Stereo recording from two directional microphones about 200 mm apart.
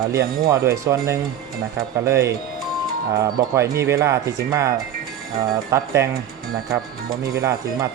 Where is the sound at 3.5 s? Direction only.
15° right (ahead or behind).